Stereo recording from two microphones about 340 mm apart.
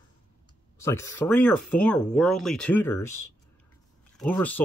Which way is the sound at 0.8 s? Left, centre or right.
Centre.